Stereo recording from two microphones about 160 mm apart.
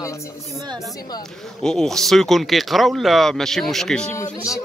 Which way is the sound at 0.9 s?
25° left (ahead or behind).